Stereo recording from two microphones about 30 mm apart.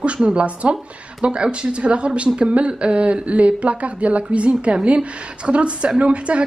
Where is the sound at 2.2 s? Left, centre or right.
Right.